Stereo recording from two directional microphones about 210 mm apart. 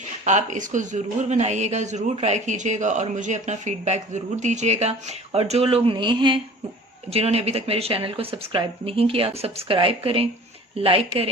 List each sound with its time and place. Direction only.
0.3 s speech: 35° right (ahead or behind)